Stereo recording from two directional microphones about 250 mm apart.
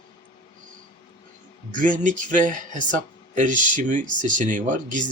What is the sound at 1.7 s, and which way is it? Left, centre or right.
Speech, right.